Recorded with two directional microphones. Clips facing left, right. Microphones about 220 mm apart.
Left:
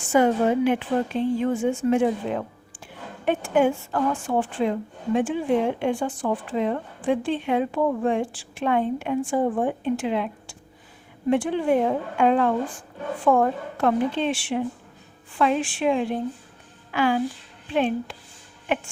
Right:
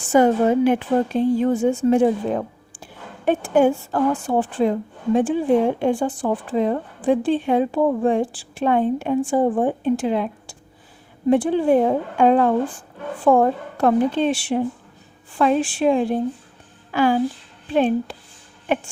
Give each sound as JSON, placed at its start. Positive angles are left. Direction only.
{"t": 0.1, "sound": "a woman's voice", "side_deg": -40}